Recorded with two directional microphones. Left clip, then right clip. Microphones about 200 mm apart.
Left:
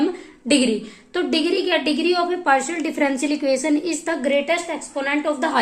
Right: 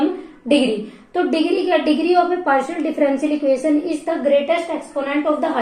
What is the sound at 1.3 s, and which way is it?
Speech, 35° left (ahead or behind).